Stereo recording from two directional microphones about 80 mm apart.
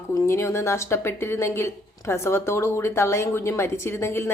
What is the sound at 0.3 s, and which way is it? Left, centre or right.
A woman's voice, left.